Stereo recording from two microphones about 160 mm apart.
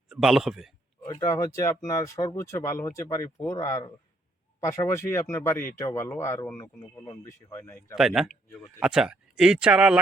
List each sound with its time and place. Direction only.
0.1 s speech: 5° right (ahead or behind)
1.3 s speech: 20° left (ahead or behind)
7.9 s speech: centre (ahead or behind)